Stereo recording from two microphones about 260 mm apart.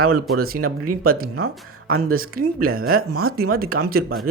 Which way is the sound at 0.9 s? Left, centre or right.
Right.